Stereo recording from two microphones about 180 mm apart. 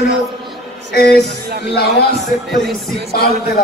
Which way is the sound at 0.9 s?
60° left (ahead or behind).